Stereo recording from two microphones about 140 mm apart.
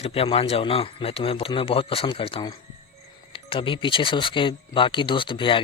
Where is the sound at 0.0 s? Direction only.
45° left (ahead or behind).